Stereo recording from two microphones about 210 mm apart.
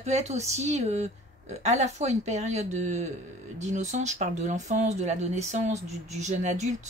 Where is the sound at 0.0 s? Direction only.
30° right (ahead or behind).